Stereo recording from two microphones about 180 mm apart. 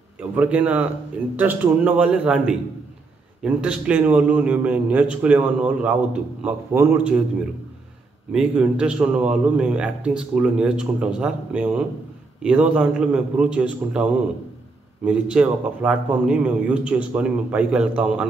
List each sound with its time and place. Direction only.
0.4 s a man's voice: 5° right (ahead or behind)
8.3 s a man's voice: 5° right (ahead or behind)